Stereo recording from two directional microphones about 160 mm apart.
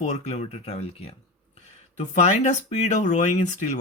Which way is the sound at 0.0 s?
45° left (ahead or behind).